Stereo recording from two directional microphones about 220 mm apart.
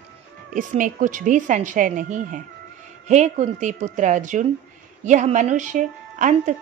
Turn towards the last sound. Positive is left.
turn(degrees=-35)  # may be behind; listen again after turning